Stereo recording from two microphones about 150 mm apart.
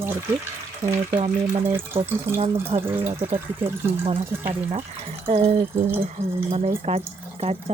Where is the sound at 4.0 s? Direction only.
40° right (ahead or behind).